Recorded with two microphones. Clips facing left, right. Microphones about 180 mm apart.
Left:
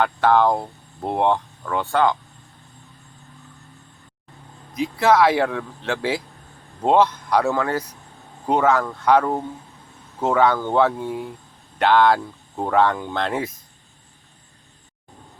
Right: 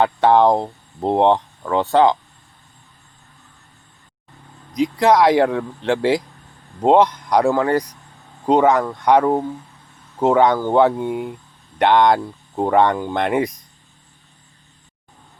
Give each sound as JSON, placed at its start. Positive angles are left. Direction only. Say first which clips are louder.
{"t": 0.0, "sound": "speech", "louder": "right 3 dB", "side_deg": -20}
{"t": 4.7, "sound": "speech", "louder": "right 3 dB", "side_deg": -15}